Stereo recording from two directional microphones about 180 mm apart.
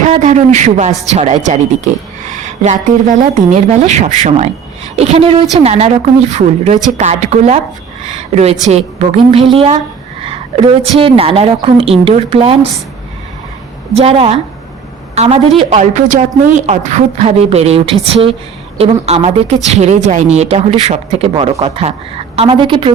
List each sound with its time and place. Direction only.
0.0 s a woman's voice: 40° right (ahead or behind)
13.9 s a woman's voice: 35° right (ahead or behind)